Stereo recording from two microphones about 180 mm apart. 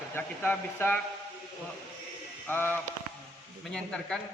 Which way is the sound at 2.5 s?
10° left (ahead or behind).